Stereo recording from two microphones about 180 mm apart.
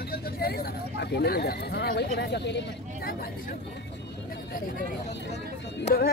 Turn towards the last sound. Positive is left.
turn(degrees=55)  # may be behind; listen again after turning